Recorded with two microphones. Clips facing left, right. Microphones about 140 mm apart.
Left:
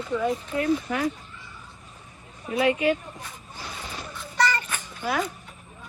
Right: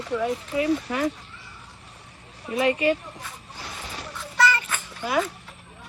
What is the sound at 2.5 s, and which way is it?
Speech, centre (ahead or behind).